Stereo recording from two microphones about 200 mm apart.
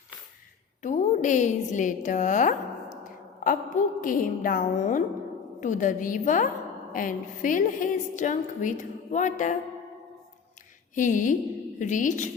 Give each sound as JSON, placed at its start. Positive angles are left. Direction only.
{"t": 0.8, "sound": "a woman's voice", "side_deg": 40}
{"t": 10.9, "sound": "a woman's voice", "side_deg": 40}